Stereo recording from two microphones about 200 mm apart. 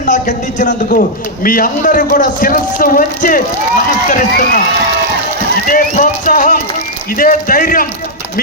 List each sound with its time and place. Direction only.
0.0 s a man's voice: 40° left (ahead or behind)
5.6 s music: 40° left (ahead or behind)
7.2 s a man's voice: 45° left (ahead or behind)